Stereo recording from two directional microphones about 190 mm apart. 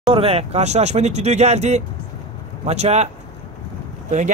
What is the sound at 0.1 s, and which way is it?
Speech, 30° right (ahead or behind).